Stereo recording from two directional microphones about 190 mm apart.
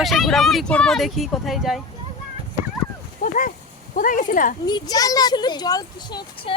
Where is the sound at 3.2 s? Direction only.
45° left (ahead or behind).